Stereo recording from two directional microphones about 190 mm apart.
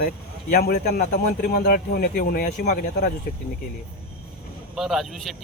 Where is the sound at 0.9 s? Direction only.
40° left (ahead or behind).